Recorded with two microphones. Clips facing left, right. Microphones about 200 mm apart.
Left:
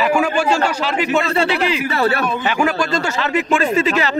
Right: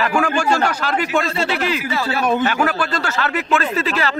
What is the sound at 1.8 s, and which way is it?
Speech, 60° left (ahead or behind).